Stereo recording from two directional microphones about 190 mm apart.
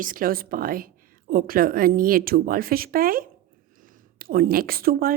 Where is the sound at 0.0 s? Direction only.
45° right (ahead or behind).